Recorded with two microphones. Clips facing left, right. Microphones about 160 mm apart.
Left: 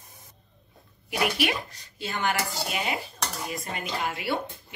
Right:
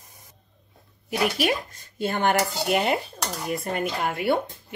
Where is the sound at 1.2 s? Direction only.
45° right (ahead or behind).